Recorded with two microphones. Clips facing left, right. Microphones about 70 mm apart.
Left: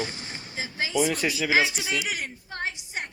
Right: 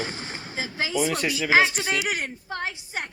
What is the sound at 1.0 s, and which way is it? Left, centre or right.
Speech, centre.